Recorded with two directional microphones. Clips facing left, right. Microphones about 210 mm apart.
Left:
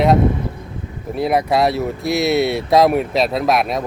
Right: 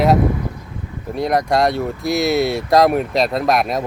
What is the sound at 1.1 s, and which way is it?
Speech, 5° left (ahead or behind).